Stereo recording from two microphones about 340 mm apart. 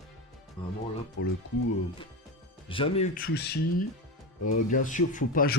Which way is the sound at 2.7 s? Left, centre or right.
Centre.